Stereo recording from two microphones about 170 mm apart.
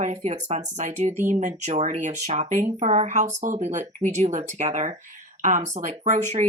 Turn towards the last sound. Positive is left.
turn(degrees=-45)  # may be behind; listen again after turning